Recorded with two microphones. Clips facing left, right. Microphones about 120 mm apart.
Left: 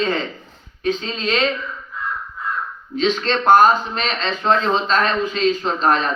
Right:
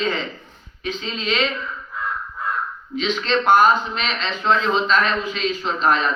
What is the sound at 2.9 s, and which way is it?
A man's voice, 35° left (ahead or behind).